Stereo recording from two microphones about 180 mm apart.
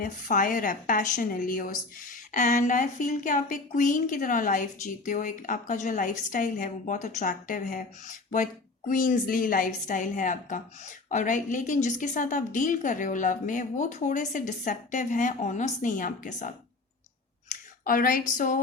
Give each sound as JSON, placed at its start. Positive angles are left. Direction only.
{"t": 0.0, "sound": "a woman's voice", "side_deg": 45}
{"t": 17.5, "sound": "speech", "side_deg": 50}